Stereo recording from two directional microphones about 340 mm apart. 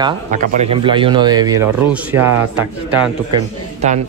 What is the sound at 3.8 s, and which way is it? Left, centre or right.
Speech, centre.